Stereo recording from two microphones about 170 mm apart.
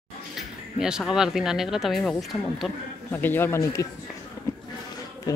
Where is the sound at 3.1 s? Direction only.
10° left (ahead or behind).